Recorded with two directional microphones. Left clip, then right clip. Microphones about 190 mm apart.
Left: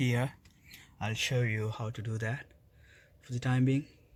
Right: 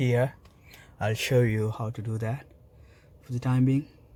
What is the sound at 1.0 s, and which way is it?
Speech, 25° right (ahead or behind).